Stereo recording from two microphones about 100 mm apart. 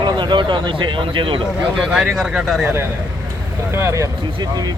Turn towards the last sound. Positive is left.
turn(degrees=-30)  # may be behind; listen again after turning